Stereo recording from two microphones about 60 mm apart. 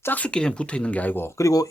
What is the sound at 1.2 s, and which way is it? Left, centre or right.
Speech, left.